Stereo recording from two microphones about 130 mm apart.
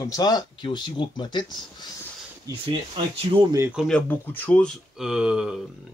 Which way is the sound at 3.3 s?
40° right (ahead or behind).